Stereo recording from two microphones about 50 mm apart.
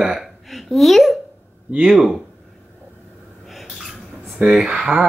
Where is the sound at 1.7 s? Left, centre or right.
Right.